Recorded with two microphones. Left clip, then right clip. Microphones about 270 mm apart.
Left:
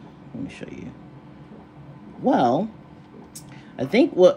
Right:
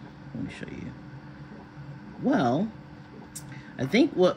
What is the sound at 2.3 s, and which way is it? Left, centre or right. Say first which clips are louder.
Speech: left 6 dB; left.